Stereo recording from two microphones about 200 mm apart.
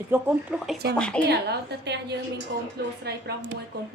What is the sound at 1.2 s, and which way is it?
Speech, 55° right (ahead or behind).